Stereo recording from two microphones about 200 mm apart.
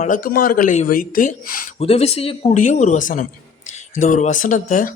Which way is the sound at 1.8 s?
30° left (ahead or behind).